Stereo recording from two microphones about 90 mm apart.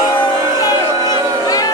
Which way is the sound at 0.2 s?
45° left (ahead or behind).